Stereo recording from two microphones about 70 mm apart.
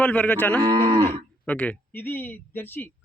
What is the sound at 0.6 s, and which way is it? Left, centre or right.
Speech, right.